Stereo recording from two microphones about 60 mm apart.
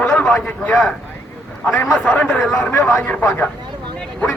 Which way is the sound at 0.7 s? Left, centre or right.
Centre.